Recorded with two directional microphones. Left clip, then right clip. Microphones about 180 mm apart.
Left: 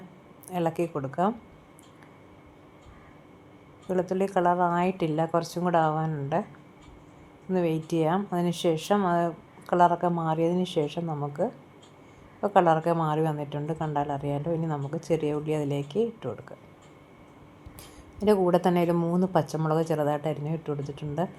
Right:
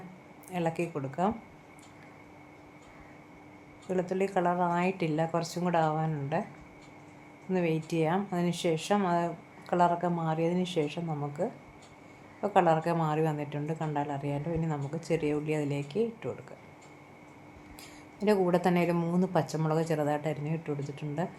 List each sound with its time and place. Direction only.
0.5 s speech: 15° left (ahead or behind)
3.8 s speech: 15° left (ahead or behind)
7.5 s speech: 15° left (ahead or behind)
18.2 s speech: 15° left (ahead or behind)